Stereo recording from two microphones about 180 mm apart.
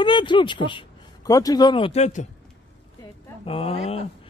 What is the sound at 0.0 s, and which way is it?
Speech, 25° left (ahead or behind).